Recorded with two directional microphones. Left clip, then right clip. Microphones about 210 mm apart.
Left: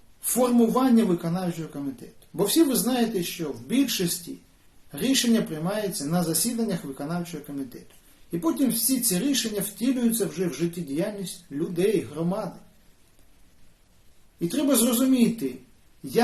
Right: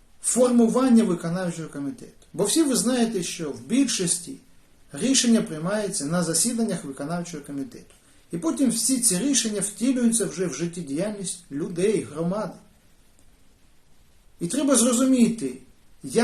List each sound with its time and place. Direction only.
0.3 s a man's voice: centre (ahead or behind)
8.3 s a man's voice: centre (ahead or behind)
14.3 s a man's voice: 5° right (ahead or behind)